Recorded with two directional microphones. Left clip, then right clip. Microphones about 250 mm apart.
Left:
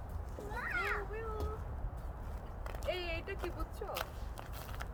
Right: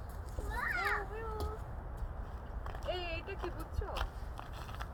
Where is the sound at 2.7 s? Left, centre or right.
Left.